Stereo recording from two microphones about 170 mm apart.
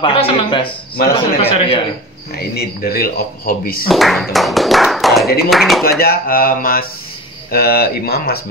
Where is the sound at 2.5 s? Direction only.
60° left (ahead or behind).